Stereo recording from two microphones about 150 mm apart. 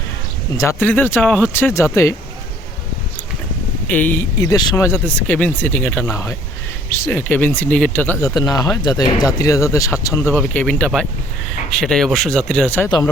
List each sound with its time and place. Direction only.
0.5 s speech: 20° left (ahead or behind)
3.8 s speech: 10° left (ahead or behind)